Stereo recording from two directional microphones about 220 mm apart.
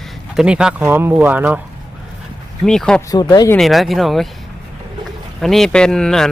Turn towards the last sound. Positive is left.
turn(degrees=0)  # may be behind; listen again after turning